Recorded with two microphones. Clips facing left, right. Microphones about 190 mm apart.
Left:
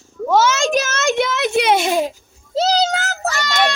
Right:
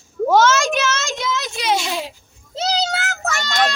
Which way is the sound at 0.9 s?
60° left (ahead or behind).